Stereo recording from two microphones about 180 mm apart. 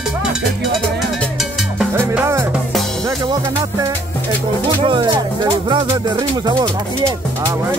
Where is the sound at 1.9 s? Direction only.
10° right (ahead or behind).